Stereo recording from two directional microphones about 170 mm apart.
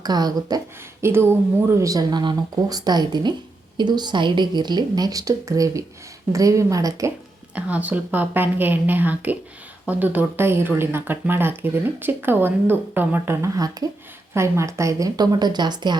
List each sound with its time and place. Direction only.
0.0 s a woman's voice: 25° right (ahead or behind)
7.5 s a woman's voice: 10° right (ahead or behind); by 16.0 s 25° right (ahead or behind)